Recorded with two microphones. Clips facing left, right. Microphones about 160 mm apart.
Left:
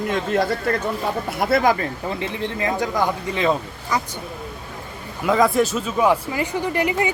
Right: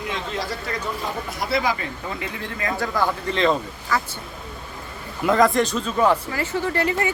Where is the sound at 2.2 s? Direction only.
25° left (ahead or behind).